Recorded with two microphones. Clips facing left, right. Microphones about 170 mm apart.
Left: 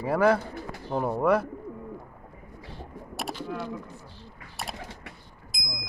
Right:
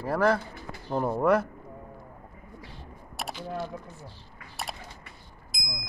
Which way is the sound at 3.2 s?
Centre (ahead or behind).